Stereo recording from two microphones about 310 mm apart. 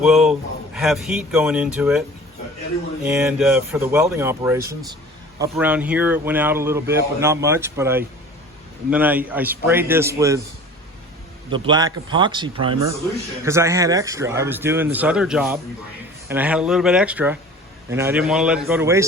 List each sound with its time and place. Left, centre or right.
0.0 s speech: centre
11.5 s speech: centre